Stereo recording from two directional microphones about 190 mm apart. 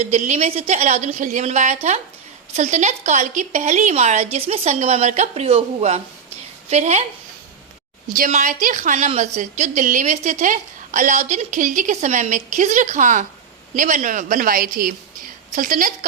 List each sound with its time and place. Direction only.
0.0 s a woman's voice: 35° right (ahead or behind)
8.1 s a woman's voice: 45° right (ahead or behind)